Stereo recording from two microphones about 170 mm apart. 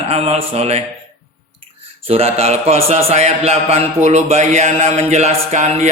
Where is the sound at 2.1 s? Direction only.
35° right (ahead or behind).